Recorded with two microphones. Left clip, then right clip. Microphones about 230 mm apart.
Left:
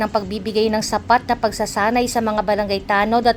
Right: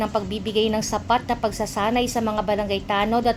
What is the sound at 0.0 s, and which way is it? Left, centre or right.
A woman's voice, left.